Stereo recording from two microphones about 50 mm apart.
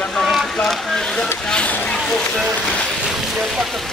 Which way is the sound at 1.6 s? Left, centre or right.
Left.